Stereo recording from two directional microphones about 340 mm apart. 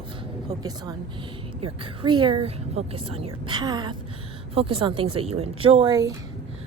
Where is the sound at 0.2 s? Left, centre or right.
Centre.